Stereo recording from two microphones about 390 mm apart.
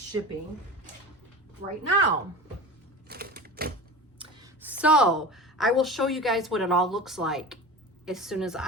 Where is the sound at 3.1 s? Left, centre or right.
Right.